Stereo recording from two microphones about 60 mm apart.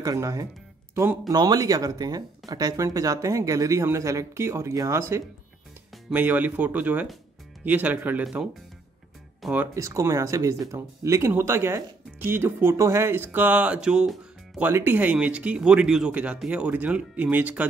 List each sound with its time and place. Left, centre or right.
0.0 s speech: right
1.3 s speech: right
3.8 s speech: right
6.1 s speech: right
9.4 s speech: centre
9.8 s speech: right
11.3 s speech: right
12.7 s speech: right; by 14.6 s centre
14.7 s speech: right
15.0 s speech: right